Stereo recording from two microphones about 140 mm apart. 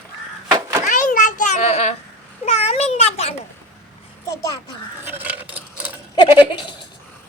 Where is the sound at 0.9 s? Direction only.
65° left (ahead or behind); by 3.3 s 45° left (ahead or behind).